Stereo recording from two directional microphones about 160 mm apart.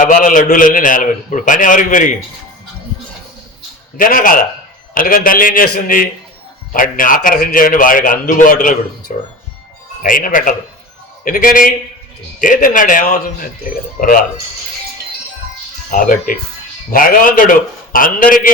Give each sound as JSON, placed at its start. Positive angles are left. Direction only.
{"t": 0.0, "sound": "a man's voice", "side_deg": 55}
{"t": 3.9, "sound": "a man's voice", "side_deg": 60}
{"t": 15.9, "sound": "a man's voice", "side_deg": 55}